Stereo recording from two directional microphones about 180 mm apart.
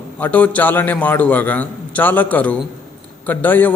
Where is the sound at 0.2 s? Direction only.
10° left (ahead or behind).